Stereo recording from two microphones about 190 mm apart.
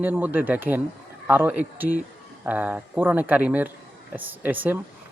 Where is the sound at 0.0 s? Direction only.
10° right (ahead or behind).